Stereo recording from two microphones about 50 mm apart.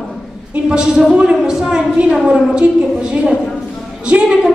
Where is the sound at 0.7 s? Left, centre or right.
Centre.